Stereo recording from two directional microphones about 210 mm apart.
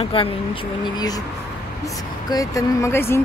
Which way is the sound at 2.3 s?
15° left (ahead or behind).